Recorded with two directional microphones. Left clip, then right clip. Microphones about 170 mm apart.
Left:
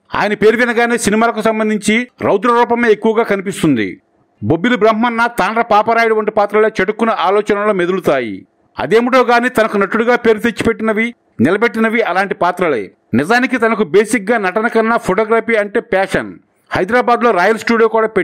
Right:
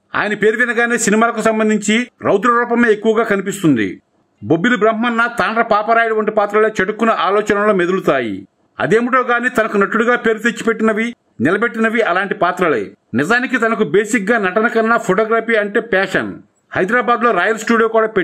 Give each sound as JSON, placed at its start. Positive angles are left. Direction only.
{"t": 0.1, "sound": "a man's voice", "side_deg": 35}